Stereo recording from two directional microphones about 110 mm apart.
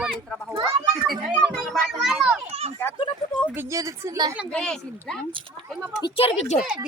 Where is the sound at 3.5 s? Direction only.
20° right (ahead or behind).